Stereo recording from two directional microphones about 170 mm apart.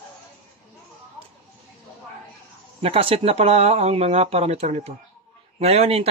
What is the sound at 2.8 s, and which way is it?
Speech, 35° right (ahead or behind).